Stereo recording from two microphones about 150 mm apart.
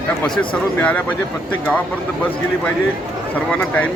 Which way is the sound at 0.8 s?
10° left (ahead or behind).